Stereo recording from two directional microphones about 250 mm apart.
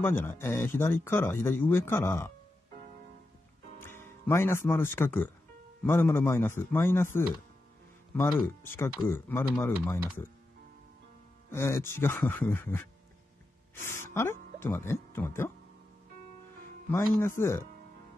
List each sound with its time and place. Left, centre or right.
0.0 s speech: centre
3.8 s speech: centre
8.6 s speech: centre
11.5 s speech: centre
13.8 s speech: centre
16.9 s speech: centre